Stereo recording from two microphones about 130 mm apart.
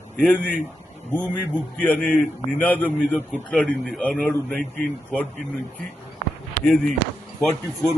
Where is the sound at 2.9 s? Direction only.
10° right (ahead or behind).